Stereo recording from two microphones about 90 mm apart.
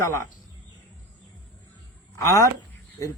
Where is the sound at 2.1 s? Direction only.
35° left (ahead or behind).